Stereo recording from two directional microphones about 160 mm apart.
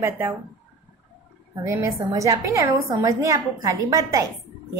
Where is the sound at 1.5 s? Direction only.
15° right (ahead or behind).